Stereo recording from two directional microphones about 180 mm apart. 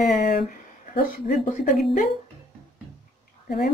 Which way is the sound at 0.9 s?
50° left (ahead or behind).